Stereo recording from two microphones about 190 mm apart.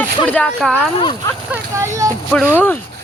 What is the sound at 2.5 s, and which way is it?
Speech, 10° left (ahead or behind).